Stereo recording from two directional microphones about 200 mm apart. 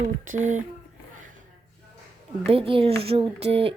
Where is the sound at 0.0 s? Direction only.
35° right (ahead or behind).